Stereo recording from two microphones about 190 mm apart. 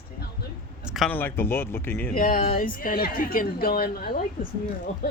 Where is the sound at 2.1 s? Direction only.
45° left (ahead or behind).